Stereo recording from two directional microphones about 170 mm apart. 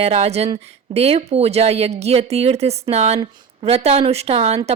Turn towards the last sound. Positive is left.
turn(degrees=-40)  # may be behind; listen again after turning